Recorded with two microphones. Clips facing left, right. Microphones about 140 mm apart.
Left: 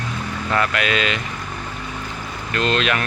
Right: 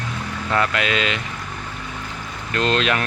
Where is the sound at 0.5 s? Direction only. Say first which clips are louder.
Even; 20° right (ahead or behind).